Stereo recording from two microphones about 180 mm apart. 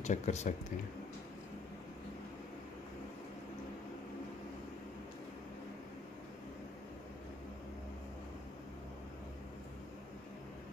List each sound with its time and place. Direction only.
0.0 s speech: 40° left (ahead or behind)